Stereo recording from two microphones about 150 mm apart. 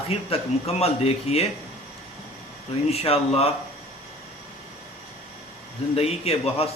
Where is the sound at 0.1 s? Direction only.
40° left (ahead or behind).